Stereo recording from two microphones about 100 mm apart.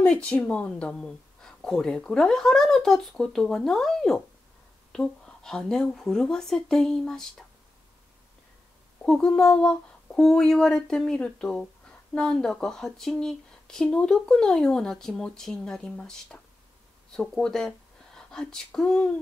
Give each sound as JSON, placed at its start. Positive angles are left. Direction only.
{"t": 0.0, "sound": "speech", "side_deg": 10}
{"t": 9.0, "sound": "speech", "side_deg": 5}